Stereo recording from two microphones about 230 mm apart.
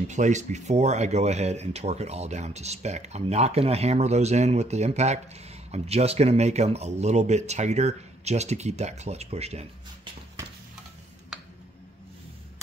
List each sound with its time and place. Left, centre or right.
0.1 s speech: right